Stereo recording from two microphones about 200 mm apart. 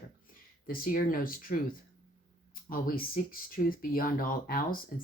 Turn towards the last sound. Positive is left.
turn(degrees=45)  # may be behind; listen again after turning